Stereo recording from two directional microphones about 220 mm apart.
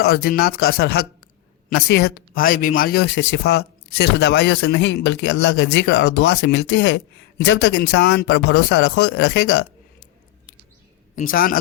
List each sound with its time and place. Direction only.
0.0 s speech: 45° left (ahead or behind)
11.1 s a man's voice: 40° left (ahead or behind)